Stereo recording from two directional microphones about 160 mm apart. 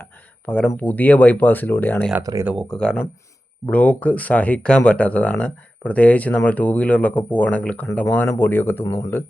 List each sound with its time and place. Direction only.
0.0 s speech: 10° left (ahead or behind)
2.2 s speech: 20° right (ahead or behind)
2.5 s speech: centre (ahead or behind)